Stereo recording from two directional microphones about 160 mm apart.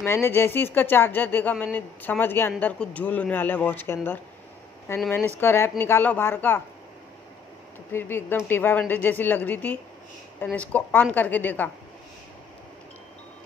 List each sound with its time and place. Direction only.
0.0 s speech: 15° left (ahead or behind)
7.9 s speech: 15° left (ahead or behind)